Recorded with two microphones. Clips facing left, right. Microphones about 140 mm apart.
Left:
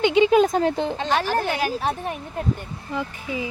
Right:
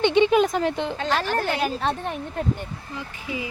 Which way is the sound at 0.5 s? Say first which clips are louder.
Left 3 dB; 40° left (ahead or behind).